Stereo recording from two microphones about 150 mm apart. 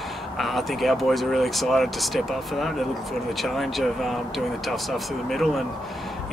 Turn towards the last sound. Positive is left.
turn(degrees=0)  # may be behind; listen again after turning